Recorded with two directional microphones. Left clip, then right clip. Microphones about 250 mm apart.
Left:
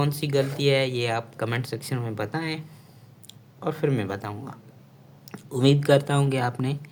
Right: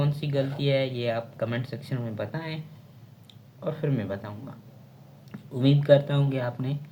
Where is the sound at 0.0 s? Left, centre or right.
Left.